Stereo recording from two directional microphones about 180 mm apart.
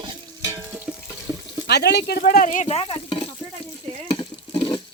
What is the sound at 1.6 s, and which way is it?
Speech, 65° left (ahead or behind).